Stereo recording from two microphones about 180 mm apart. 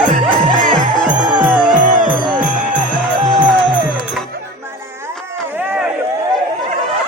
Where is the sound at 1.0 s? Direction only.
5° right (ahead or behind).